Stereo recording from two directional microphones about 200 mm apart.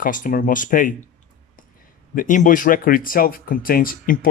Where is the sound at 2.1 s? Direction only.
40° left (ahead or behind).